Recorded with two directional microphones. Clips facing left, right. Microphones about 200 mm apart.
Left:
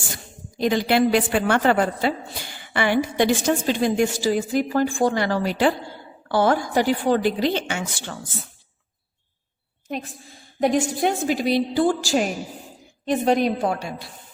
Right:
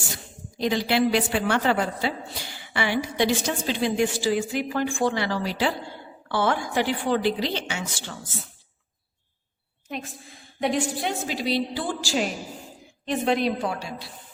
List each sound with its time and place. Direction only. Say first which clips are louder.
0.6 s a woman's voice: left 3 dB; 50° left (ahead or behind)
6.2 s a woman's voice: left 5 dB; 40° left (ahead or behind)
10.6 s a woman's voice: left 5 dB; 45° left (ahead or behind)